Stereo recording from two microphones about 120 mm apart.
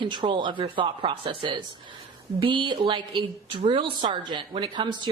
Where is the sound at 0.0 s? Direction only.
40° right (ahead or behind).